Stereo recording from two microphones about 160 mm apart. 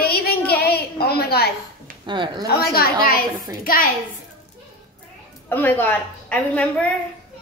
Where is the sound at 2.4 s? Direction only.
70° left (ahead or behind).